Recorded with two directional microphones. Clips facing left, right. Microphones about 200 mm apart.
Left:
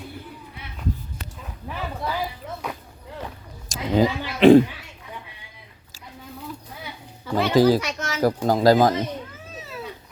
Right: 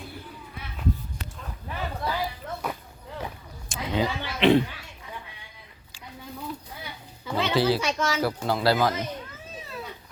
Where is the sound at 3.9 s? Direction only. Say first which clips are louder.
Left 7 dB; 45° left (ahead or behind).